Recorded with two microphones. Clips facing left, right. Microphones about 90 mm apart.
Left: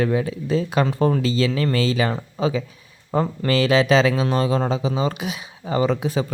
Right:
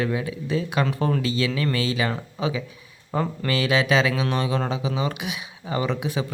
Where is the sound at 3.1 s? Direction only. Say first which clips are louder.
Left 4 dB; 20° left (ahead or behind).